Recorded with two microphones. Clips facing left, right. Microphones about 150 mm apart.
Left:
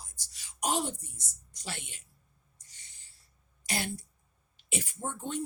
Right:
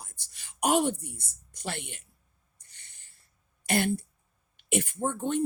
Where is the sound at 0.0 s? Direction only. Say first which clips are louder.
Right 4 dB; 60° right (ahead or behind).